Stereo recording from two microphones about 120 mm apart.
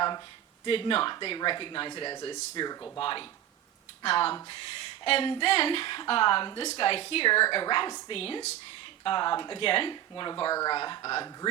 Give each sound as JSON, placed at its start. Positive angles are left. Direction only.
{"t": 0.6, "sound": "speech", "side_deg": 50}
{"t": 6.6, "sound": "speech", "side_deg": 55}
{"t": 8.1, "sound": "speech", "side_deg": 55}
{"t": 9.0, "sound": "speech", "side_deg": 40}
{"t": 10.5, "sound": "speech", "side_deg": 30}
{"t": 10.8, "sound": "speech", "side_deg": 40}